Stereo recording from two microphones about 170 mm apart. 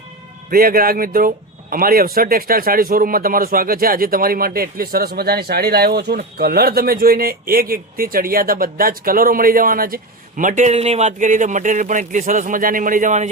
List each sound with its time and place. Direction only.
0.5 s speech: 60° right (ahead or behind)